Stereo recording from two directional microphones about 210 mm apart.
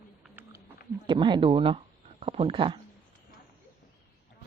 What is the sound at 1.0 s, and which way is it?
Speech, 20° right (ahead or behind).